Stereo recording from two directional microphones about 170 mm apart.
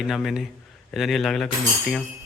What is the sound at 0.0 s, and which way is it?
A man's voice, centre (ahead or behind).